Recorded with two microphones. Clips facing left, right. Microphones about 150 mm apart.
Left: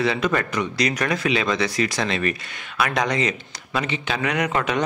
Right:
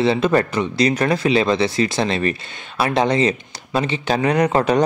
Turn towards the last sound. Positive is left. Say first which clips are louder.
# right 6 dB
turn(degrees=-35)  # may be behind; listen again after turning